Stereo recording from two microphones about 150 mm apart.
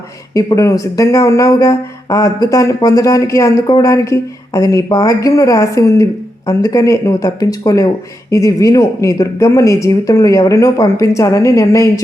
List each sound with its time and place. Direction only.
0.3 s speech: 20° left (ahead or behind)